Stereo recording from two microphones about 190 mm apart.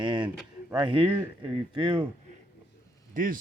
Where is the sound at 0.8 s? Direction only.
25° right (ahead or behind).